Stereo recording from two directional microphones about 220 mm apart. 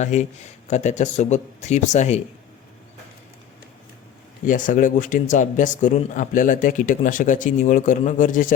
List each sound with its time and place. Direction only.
0.0 s speech: 30° left (ahead or behind)
4.4 s speech: 35° left (ahead or behind)